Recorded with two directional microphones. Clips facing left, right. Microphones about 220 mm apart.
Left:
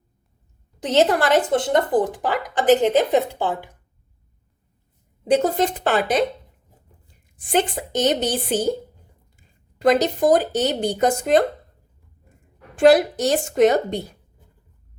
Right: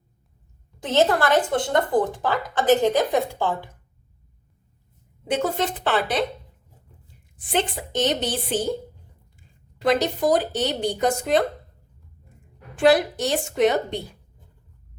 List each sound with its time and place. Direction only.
0.8 s speech: 20° left (ahead or behind)
5.3 s speech: 40° left (ahead or behind)
7.3 s speech: 45° left (ahead or behind)
9.7 s speech: 45° left (ahead or behind)
12.8 s speech: 45° left (ahead or behind)